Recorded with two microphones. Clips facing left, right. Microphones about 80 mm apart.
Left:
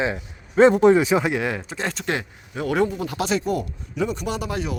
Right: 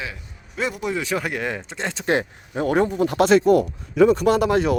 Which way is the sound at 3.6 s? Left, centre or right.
Right.